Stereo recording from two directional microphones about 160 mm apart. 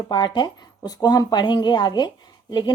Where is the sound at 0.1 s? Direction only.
30° left (ahead or behind).